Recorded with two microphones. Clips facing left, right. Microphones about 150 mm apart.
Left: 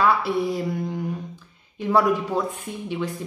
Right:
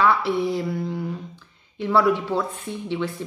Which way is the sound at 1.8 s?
15° left (ahead or behind).